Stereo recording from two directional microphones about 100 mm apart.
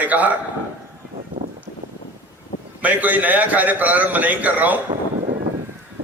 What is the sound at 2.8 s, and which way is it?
A man's voice, 15° right (ahead or behind).